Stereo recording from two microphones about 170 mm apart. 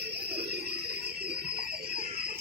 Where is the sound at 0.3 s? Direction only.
70° right (ahead or behind).